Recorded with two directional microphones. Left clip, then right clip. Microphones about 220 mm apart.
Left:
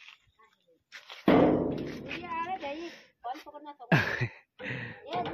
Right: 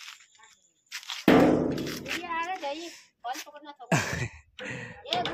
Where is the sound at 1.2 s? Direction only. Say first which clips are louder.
Right 2 dB; 55° right (ahead or behind).